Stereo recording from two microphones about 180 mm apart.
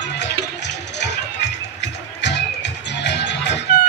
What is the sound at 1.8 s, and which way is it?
Music, 75° left (ahead or behind).